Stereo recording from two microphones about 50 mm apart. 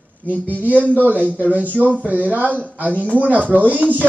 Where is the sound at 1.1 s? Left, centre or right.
Right.